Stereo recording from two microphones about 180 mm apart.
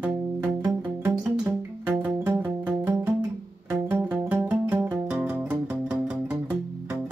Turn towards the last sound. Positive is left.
turn(degrees=-5)  # may be behind; listen again after turning